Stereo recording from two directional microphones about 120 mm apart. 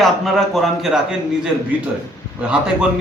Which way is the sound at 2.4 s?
10° right (ahead or behind).